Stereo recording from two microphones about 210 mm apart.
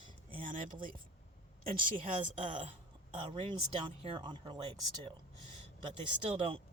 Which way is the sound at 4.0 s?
25° right (ahead or behind).